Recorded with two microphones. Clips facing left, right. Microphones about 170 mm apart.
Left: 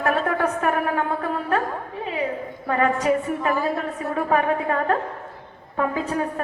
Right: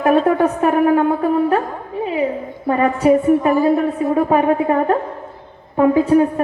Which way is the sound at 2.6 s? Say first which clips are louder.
Right 6 dB; 25° right (ahead or behind).